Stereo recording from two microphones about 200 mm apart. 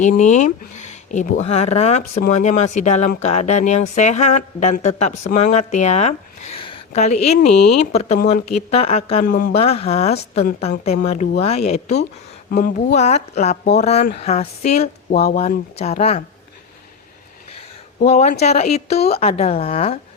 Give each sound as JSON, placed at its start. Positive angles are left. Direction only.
{"t": 0.0, "sound": "speech", "side_deg": 35}
{"t": 9.2, "sound": "speech", "side_deg": 45}
{"t": 9.6, "sound": "speech", "side_deg": 30}
{"t": 12.5, "sound": "speech", "side_deg": 50}
{"t": 12.9, "sound": "speech", "side_deg": 35}
{"t": 18.0, "sound": "speech", "side_deg": 35}